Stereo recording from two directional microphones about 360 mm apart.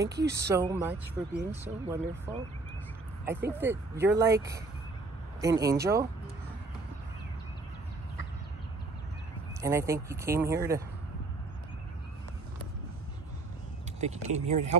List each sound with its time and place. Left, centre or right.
0.3 s speech: centre
9.6 s speech: centre
13.9 s speech: centre